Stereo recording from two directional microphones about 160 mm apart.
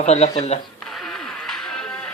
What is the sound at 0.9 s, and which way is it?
Music, 5° left (ahead or behind).